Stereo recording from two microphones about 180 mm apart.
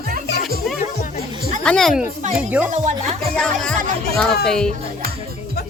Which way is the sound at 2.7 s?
40° right (ahead or behind).